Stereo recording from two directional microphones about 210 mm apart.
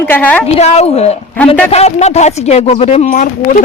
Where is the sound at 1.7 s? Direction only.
30° left (ahead or behind).